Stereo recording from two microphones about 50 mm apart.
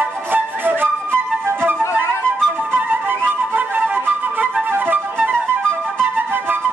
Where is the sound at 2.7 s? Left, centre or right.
Right.